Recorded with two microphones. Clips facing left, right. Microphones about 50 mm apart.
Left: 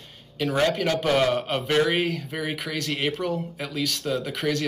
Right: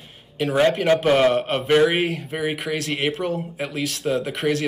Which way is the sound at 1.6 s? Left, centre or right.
Centre.